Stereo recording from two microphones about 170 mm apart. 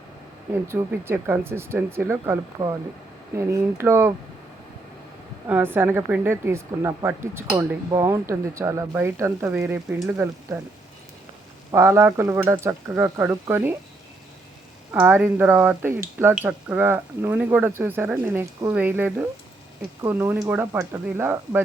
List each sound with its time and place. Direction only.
0.7 s speech: 15° right (ahead or behind)
5.5 s speech: 10° right (ahead or behind)
11.7 s speech: 15° right (ahead or behind)
14.9 s speech: 10° right (ahead or behind)